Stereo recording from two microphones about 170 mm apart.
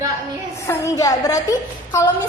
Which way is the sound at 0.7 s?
20° left (ahead or behind).